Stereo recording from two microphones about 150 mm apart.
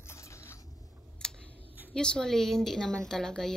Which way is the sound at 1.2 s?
5° left (ahead or behind).